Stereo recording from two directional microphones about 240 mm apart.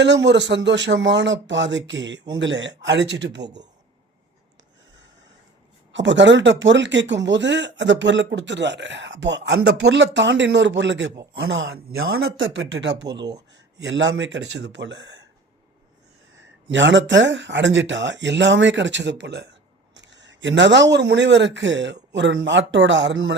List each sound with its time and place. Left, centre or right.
0.0 s speech: right
5.9 s speech: right
16.6 s speech: right
19.9 s a sound: right
20.9 s speech: right